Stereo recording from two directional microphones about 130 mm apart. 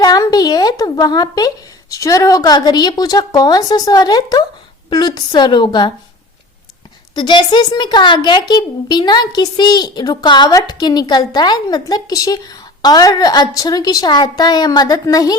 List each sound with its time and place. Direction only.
0.0 s a woman's voice: 30° left (ahead or behind)
7.1 s a woman's voice: 35° left (ahead or behind)